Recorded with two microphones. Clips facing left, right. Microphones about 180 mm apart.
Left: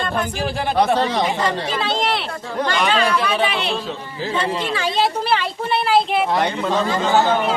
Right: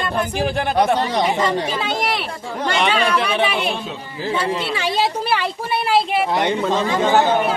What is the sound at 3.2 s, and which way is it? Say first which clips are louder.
Speech: right 1 dB; 10° right (ahead or behind).